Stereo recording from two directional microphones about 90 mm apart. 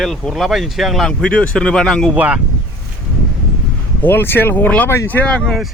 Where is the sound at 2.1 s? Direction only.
15° right (ahead or behind).